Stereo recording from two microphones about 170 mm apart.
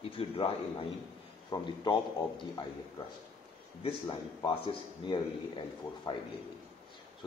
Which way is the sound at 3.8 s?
30° left (ahead or behind).